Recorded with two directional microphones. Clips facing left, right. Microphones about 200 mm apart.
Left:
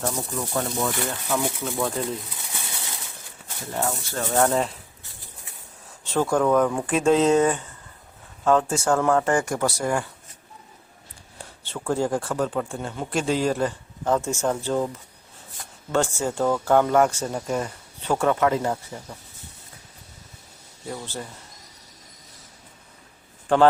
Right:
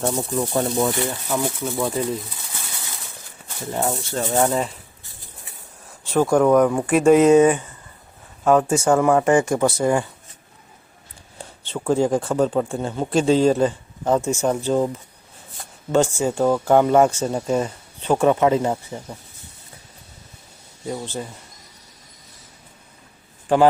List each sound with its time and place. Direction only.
0.0 s speech: 30° right (ahead or behind)
1.0 s speech: 5° right (ahead or behind)
3.7 s speech: 20° right (ahead or behind); by 4.8 s centre (ahead or behind)
6.1 s speech: 10° right (ahead or behind)
11.6 s speech: 20° right (ahead or behind)
15.9 s speech: 15° right (ahead or behind)
20.8 s speech: 20° right (ahead or behind)